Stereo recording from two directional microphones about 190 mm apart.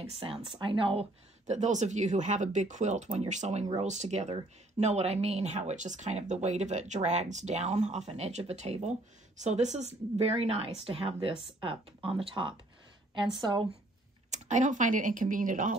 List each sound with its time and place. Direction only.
0.0 s speech: 30° right (ahead or behind)
1.5 s speech: 40° right (ahead or behind)
14.3 s speech: 40° right (ahead or behind)